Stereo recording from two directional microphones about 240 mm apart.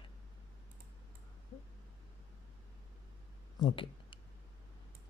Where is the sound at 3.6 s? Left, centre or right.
Centre.